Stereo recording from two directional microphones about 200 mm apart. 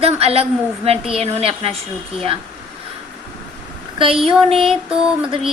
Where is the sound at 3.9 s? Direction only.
25° right (ahead or behind).